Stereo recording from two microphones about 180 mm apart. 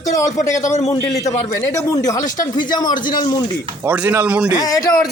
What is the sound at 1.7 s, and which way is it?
Speech, 20° left (ahead or behind).